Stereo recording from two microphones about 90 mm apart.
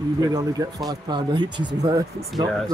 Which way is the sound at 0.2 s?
40° right (ahead or behind).